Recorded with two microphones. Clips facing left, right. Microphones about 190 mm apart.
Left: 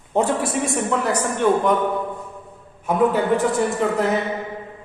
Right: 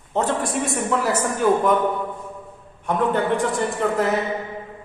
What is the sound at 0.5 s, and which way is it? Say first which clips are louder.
A man's voice: left 1 dB; centre (ahead or behind).